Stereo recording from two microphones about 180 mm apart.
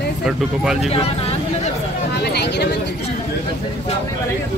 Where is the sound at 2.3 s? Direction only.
65° left (ahead or behind).